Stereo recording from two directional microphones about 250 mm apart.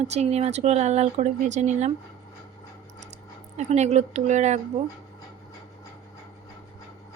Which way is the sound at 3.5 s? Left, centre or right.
Right.